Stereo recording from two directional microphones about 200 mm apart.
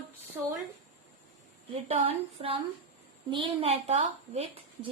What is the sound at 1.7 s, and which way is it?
A woman's voice, 30° right (ahead or behind).